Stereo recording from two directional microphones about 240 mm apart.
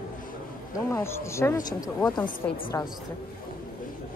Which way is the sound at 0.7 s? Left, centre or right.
Centre.